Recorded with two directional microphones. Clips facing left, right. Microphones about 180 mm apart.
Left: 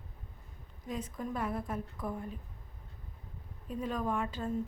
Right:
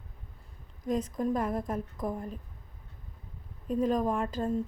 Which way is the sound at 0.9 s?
40° right (ahead or behind).